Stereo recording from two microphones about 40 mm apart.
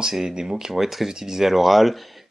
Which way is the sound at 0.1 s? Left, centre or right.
Centre.